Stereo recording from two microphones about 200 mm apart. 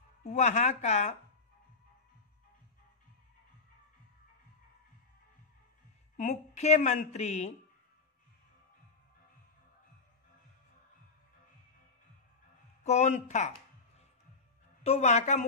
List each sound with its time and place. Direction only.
0.2 s a woman's voice: 35° left (ahead or behind)
6.1 s a woman's voice: 35° left (ahead or behind)
12.8 s a woman's voice: 35° left (ahead or behind)
14.8 s a woman's voice: 35° left (ahead or behind)